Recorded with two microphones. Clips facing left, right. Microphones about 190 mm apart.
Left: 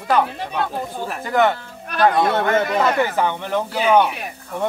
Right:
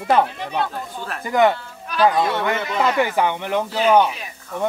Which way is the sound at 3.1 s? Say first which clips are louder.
Even; 15° right (ahead or behind).